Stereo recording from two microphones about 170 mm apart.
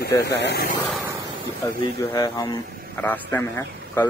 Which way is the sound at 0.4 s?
90° left.